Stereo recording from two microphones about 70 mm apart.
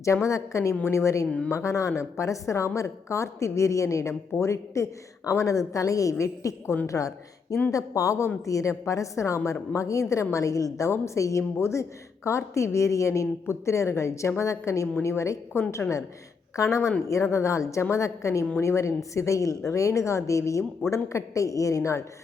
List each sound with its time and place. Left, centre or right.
0.0 s a woman's voice: left